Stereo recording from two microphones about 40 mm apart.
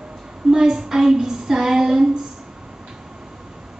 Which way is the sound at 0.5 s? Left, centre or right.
Centre.